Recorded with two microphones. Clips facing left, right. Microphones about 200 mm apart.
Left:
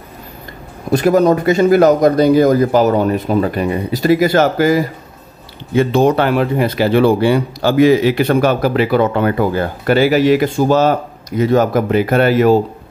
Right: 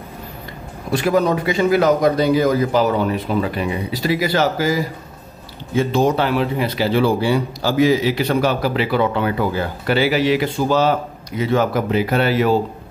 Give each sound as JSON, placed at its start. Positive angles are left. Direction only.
{"t": 0.9, "sound": "speech", "side_deg": 45}